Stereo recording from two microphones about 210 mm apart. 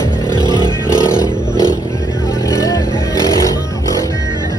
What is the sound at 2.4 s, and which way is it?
Vehicle, 15° left (ahead or behind).